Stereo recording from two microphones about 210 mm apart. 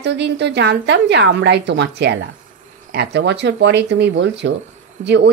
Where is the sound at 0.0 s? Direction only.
55° right (ahead or behind).